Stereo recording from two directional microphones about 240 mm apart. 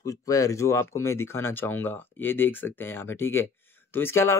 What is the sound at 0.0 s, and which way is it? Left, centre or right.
Speech, centre.